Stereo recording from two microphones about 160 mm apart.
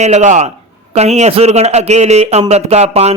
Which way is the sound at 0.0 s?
45° right (ahead or behind).